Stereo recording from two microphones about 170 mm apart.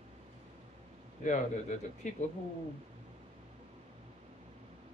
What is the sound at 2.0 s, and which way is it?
Speech, 45° left (ahead or behind).